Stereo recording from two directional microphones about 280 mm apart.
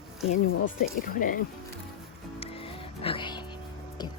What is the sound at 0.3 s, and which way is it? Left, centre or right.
Speech, left.